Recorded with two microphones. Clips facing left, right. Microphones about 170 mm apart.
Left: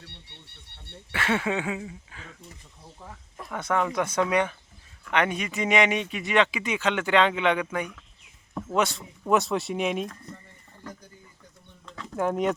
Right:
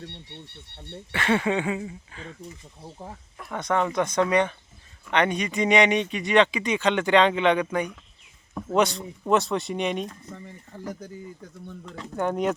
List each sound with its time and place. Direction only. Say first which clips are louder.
1.1 s speech: right 3 dB; 5° left (ahead or behind)
2.8 s speech: right 6 dB; 30° right (ahead or behind)
3.5 s speech: right 2 dB; 5° left (ahead or behind)
10.3 s speech: right 10 dB; 90° right
12.1 s speech: even; centre (ahead or behind)